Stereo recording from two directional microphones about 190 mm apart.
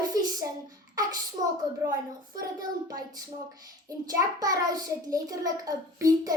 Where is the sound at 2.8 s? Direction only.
20° right (ahead or behind).